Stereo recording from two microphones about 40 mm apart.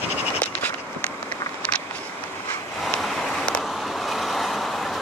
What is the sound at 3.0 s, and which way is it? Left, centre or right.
Vehicle, centre.